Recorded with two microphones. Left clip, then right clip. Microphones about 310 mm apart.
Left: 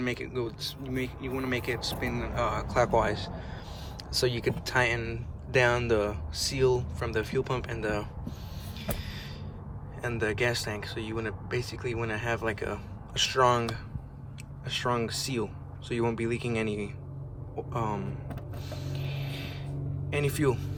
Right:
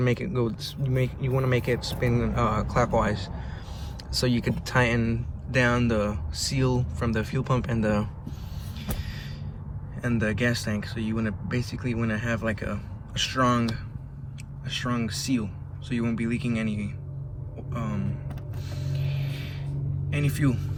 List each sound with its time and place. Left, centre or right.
0.0 s speech: centre
10.0 s speech: centre
18.7 s vehicle: centre
20.1 s speech: centre